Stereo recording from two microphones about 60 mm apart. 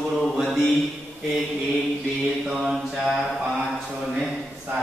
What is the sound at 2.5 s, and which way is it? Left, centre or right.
Mantra, centre.